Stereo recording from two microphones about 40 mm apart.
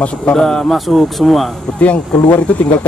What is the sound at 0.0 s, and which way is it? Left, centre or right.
Speech, left.